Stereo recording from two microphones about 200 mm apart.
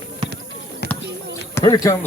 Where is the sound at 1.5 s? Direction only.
15° left (ahead or behind).